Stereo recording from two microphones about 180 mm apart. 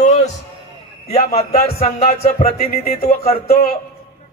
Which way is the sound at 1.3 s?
35° left (ahead or behind).